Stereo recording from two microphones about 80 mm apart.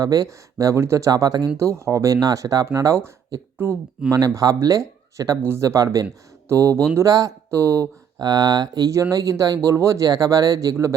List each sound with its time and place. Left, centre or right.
0.0 s speech: right
1.5 s speech: right
3.6 s speech: right
4.1 s speech: right
8.2 s speech: right
8.9 s speech: right